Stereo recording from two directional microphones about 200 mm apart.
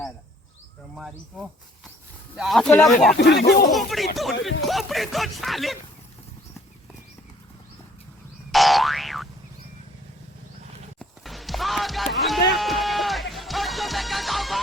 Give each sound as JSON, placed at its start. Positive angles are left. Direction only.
{"t": 0.9, "sound": "speech", "side_deg": -5}
{"t": 3.2, "sound": "speech", "side_deg": 55}
{"t": 3.7, "sound": "speech", "side_deg": 0}
{"t": 8.5, "sound": "boing", "side_deg": 0}
{"t": 11.0, "sound": "run", "side_deg": 0}
{"t": 12.5, "sound": "music", "side_deg": 0}